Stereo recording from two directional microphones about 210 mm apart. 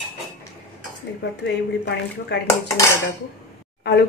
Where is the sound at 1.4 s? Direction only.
55° left (ahead or behind).